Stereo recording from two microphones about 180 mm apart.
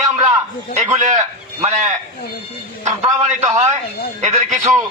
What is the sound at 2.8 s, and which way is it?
Speech, 40° right (ahead or behind).